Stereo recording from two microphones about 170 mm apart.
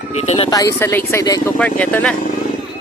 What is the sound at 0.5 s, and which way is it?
Speech, 20° left (ahead or behind).